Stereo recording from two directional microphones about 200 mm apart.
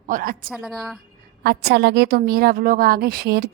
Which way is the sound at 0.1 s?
45° right (ahead or behind).